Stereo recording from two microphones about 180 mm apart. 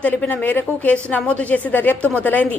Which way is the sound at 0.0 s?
10° left (ahead or behind).